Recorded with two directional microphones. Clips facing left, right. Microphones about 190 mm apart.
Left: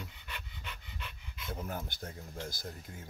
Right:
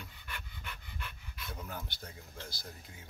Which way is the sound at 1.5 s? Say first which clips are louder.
Left 5 dB; 45° left (ahead or behind).